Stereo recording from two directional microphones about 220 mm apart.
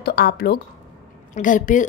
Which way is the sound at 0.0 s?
45° left (ahead or behind).